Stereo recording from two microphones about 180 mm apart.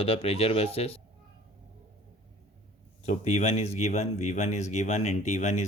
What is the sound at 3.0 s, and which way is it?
Speech, 40° left (ahead or behind).